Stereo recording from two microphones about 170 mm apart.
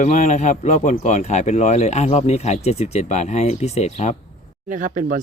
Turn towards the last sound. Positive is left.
turn(degrees=-50)  # may be behind; listen again after turning